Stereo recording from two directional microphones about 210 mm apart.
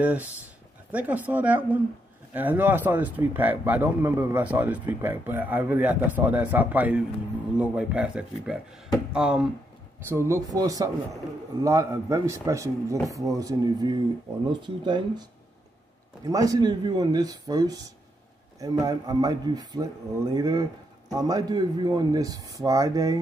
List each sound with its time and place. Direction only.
0.0 s speech: 5° right (ahead or behind)
16.3 s speech: 15° right (ahead or behind)